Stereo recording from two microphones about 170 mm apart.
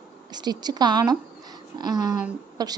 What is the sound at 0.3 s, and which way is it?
A woman's voice, 25° right (ahead or behind).